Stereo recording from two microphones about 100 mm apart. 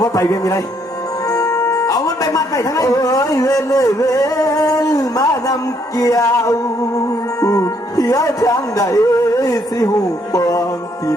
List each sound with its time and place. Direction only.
0.0 s speech: 40° left (ahead or behind)